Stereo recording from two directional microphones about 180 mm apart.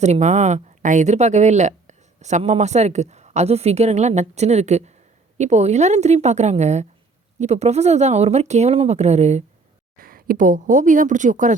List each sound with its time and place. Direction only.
0.0 s speech: 40° right (ahead or behind)
10.0 s speech: 55° right (ahead or behind)